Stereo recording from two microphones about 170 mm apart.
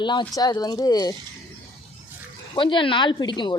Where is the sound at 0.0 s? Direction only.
25° left (ahead or behind).